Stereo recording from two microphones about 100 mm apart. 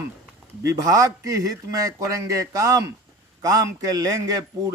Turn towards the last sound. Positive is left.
turn(degrees=-35)  # may be behind; listen again after turning